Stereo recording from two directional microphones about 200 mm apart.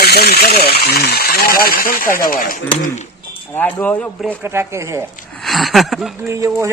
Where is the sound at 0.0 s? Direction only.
55° left (ahead or behind).